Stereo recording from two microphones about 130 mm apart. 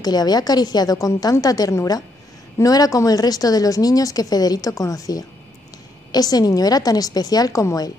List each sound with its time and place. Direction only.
0.0 s a woman's voice: 30° left (ahead or behind)